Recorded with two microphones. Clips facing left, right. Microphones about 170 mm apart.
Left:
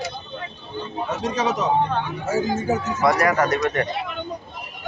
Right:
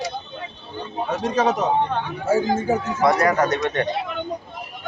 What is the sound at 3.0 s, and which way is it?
Speech, 25° right (ahead or behind).